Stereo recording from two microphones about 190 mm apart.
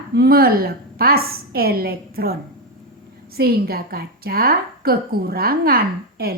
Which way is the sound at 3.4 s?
55° right (ahead or behind).